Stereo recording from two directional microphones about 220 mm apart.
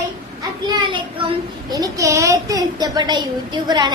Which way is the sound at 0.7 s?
20° right (ahead or behind).